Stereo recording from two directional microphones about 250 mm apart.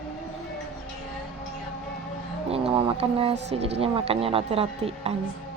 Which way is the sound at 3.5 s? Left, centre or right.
Right.